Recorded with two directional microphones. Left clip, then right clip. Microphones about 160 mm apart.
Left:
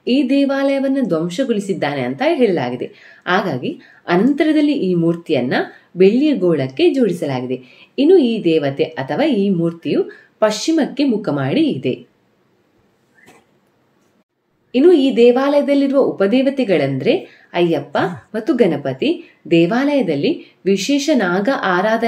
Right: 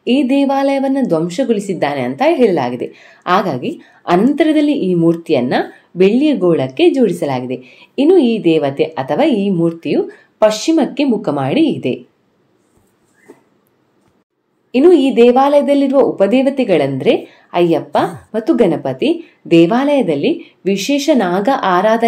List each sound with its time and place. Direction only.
0.0 s speech: 20° right (ahead or behind)
14.7 s speech: 20° right (ahead or behind)